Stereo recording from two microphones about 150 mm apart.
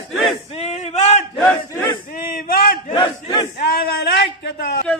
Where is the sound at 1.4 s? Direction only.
15° left (ahead or behind).